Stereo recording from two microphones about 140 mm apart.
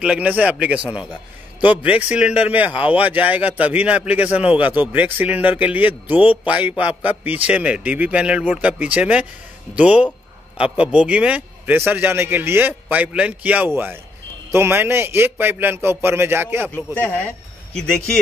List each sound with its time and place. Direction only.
0.0 s a man's voice: 10° right (ahead or behind)
16.7 s speech: 10° left (ahead or behind)